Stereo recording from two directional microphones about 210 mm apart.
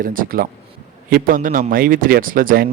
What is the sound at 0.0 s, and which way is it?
Speech, 40° right (ahead or behind).